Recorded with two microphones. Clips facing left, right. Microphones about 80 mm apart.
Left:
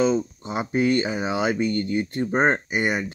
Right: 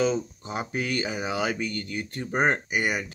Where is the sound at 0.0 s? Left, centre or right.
Left.